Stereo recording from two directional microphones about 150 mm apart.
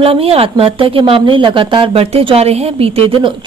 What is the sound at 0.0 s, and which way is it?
Speech, 40° right (ahead or behind).